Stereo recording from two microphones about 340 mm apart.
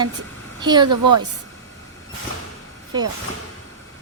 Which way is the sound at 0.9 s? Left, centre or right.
Right.